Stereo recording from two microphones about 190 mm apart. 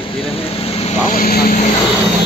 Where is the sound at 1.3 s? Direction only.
50° left (ahead or behind).